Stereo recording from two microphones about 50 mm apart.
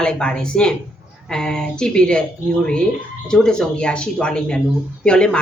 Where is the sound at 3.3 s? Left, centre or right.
Centre.